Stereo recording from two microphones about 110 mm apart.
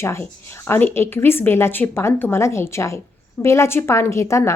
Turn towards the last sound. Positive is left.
turn(degrees=25)  # may be behind; listen again after turning